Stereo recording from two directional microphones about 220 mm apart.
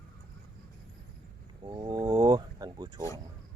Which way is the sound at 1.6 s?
20° right (ahead or behind).